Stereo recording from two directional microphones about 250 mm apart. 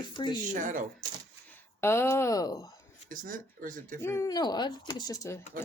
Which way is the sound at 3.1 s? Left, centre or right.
Right.